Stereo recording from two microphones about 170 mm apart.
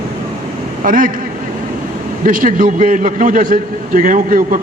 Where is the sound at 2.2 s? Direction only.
50° right (ahead or behind).